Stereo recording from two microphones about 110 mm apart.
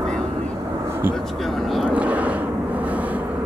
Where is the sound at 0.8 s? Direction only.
20° right (ahead or behind).